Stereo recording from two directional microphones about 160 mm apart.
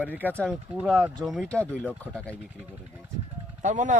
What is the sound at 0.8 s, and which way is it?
Speech, 10° right (ahead or behind).